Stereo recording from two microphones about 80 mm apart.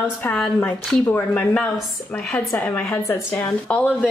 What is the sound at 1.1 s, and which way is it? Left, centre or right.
A woman's voice, centre.